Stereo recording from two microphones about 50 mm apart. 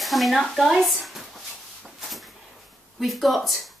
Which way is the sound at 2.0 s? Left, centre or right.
Centre.